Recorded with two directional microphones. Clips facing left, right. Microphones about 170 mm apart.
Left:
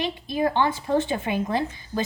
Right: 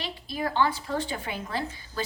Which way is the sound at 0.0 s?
20° left (ahead or behind).